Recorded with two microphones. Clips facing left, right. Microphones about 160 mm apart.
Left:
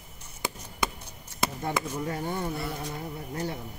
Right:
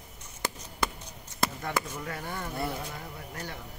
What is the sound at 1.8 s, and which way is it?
Speech, 20° left (ahead or behind).